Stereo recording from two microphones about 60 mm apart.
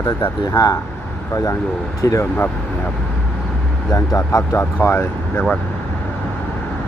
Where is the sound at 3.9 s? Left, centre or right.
Left.